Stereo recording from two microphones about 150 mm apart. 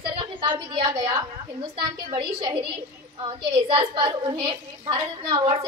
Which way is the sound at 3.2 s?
35° right (ahead or behind).